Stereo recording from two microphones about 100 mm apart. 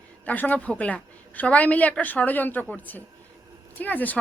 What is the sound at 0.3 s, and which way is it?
Speech, 15° left (ahead or behind).